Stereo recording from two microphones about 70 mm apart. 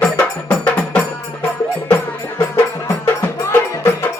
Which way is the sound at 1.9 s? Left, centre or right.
Left.